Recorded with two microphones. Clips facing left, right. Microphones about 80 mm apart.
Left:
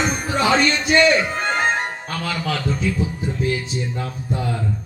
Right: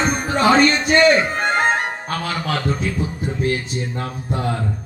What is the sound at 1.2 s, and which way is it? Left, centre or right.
A man's voice, right.